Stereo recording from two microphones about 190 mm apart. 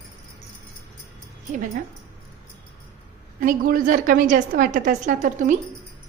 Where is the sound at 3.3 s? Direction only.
45° right (ahead or behind).